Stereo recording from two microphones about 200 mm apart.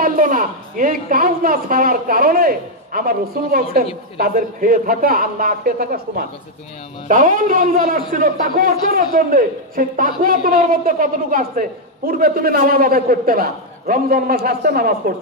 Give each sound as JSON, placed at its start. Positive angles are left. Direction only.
{"t": 0.0, "sound": "a man's voice", "side_deg": -45}